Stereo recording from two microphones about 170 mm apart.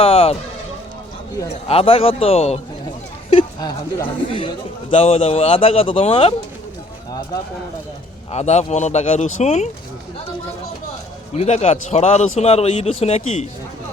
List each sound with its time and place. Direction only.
0.0 s music: 35° left (ahead or behind)
1.6 s a man's voice: 35° left (ahead or behind)
8.3 s a man's voice: 40° left (ahead or behind)
11.3 s a man's voice: 40° left (ahead or behind)